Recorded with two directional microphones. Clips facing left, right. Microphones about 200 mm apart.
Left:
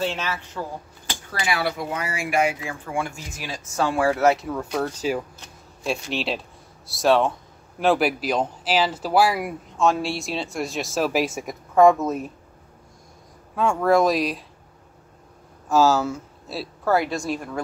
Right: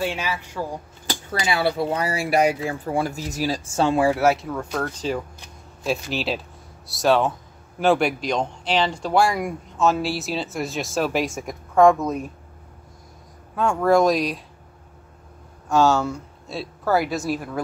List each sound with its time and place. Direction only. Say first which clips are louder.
0.0 s a man's voice: right 1 dB; 10° right (ahead or behind)
1.4 s speech: right 3 dB; 25° right (ahead or behind)
4.1 s speech: even; 5° right (ahead or behind)
13.6 s speech: right 1 dB; centre (ahead or behind)
15.7 s speech: even; centre (ahead or behind)